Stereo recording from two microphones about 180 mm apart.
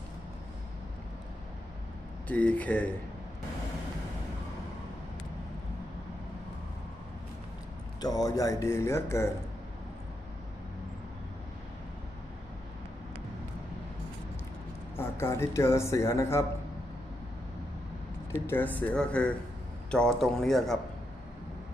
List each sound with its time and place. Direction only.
2.2 s speech: 10° left (ahead or behind)
8.0 s speech: 20° left (ahead or behind)
14.9 s speech: 15° left (ahead or behind)
18.4 s speech: 10° left (ahead or behind)